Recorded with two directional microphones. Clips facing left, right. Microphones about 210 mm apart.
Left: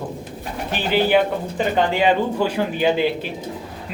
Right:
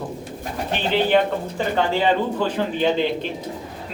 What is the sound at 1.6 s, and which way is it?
Speech, 15° left (ahead or behind).